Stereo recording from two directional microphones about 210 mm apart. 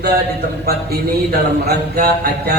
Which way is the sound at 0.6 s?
50° right (ahead or behind).